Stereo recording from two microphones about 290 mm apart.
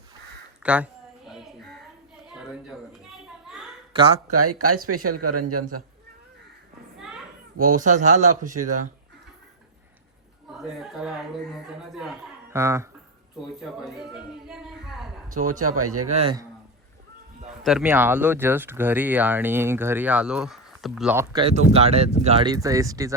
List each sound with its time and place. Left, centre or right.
0.6 s a sound: centre
2.3 s children playing: centre
3.9 s speech: centre
4.3 s speech: right
7.5 s speech: right
7.8 s speech: right
10.5 s speech: centre
15.6 s speech: right
16.1 s speech: centre
17.6 s speech: centre